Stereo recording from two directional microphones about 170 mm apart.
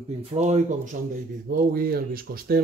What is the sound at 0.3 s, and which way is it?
Speech, 40° right (ahead or behind).